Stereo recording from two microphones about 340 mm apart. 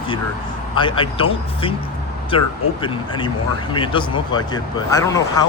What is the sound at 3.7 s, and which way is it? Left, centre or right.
Speech, centre.